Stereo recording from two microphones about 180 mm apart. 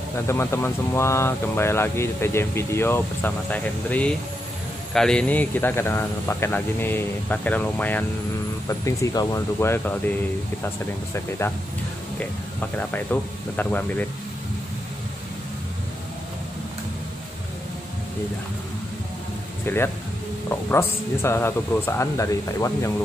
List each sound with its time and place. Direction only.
0.3 s speech: 15° left (ahead or behind)
11.1 s speech: 15° left (ahead or behind)
12.7 s speech: 10° left (ahead or behind)
19.6 s speech: 10° left (ahead or behind)